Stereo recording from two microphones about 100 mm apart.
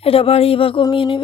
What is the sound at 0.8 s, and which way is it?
Speech, 55° left (ahead or behind).